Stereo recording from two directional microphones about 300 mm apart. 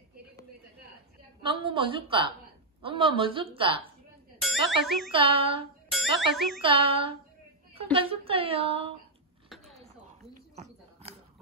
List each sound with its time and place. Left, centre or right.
1.6 s a woman's voice: centre
4.4 s speech: centre
5.1 s a woman's voice: centre
5.9 s speech: centre
6.6 s a woman's voice: centre
10.5 s a sound: right